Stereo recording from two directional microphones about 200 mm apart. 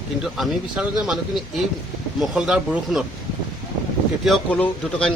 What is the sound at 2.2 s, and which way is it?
Speech, 5° right (ahead or behind).